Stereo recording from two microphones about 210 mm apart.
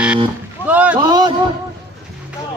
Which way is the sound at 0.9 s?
20° right (ahead or behind).